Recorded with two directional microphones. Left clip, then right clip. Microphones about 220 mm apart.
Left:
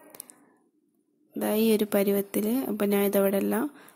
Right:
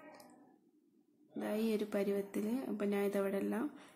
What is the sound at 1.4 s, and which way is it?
Speech, 40° left (ahead or behind).